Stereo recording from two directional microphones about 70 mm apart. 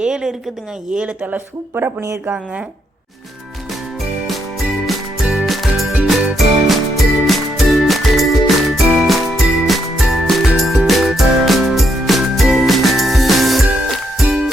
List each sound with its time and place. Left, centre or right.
0.0 s a woman's voice: centre
2.0 s speech: right
2.3 s speech: centre
4.3 s music: centre